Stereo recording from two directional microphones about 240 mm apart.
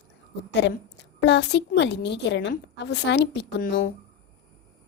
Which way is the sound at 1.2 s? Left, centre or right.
Left.